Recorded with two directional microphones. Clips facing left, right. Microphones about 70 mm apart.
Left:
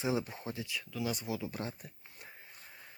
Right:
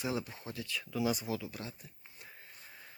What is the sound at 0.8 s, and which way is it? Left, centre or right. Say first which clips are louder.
Speech: right 7 dB; centre.